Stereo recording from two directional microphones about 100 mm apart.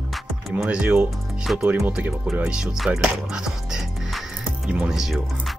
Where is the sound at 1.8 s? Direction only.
15° right (ahead or behind).